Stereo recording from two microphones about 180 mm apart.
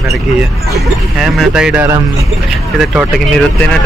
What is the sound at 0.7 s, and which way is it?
Speech, centre (ahead or behind).